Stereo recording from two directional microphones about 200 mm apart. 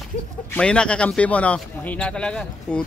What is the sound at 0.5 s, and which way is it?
Speech, 5° left (ahead or behind).